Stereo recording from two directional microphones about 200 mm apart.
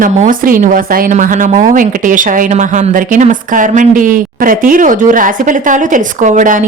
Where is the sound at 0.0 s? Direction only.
40° right (ahead or behind).